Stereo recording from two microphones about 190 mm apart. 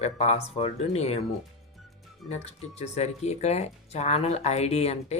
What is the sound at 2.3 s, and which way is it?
Speech, 35° left (ahead or behind).